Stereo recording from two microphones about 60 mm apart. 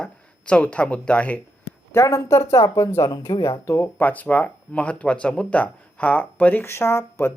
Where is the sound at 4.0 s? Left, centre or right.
Left.